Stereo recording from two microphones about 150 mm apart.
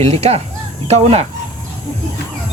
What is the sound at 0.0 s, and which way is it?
Speech, 45° right (ahead or behind).